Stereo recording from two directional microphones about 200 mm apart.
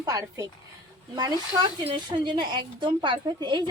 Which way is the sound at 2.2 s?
25° right (ahead or behind).